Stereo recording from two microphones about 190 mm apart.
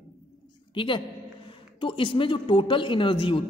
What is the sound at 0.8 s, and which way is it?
Speech, 25° left (ahead or behind).